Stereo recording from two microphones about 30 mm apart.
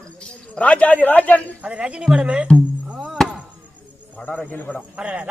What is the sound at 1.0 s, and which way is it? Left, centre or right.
Speech, left.